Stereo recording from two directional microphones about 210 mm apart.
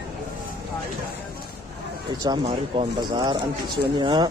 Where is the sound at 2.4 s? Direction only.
25° right (ahead or behind).